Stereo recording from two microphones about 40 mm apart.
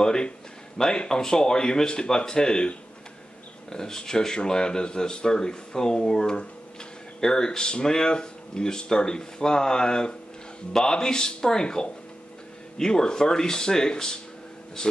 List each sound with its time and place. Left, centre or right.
0.0 s speech: centre